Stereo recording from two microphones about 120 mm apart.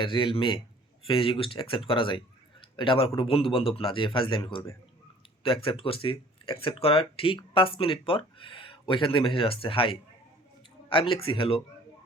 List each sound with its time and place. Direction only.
0.0 s speech: 45° left (ahead or behind)